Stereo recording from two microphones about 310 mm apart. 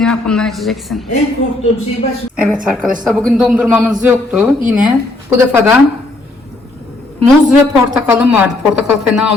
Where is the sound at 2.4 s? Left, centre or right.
Centre.